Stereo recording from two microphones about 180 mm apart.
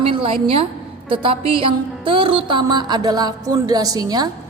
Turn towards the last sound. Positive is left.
turn(degrees=-20)  # may be behind; listen again after turning